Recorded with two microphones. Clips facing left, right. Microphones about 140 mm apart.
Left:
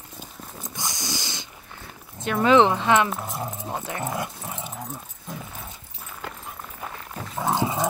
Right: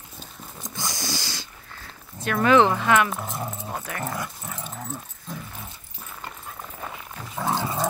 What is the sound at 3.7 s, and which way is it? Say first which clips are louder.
Dog: left 3 dB; 20° left (ahead or behind).